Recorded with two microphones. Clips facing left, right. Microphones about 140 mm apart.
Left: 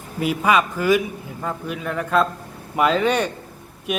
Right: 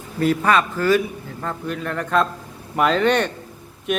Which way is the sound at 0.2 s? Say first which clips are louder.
Right 1 dB; 10° left (ahead or behind).